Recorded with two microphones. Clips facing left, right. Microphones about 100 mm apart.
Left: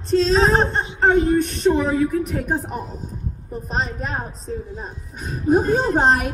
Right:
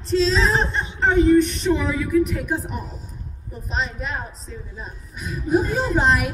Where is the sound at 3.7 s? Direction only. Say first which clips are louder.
Left 1 dB; 40° left (ahead or behind).